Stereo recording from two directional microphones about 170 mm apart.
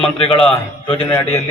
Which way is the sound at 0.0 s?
35° left (ahead or behind).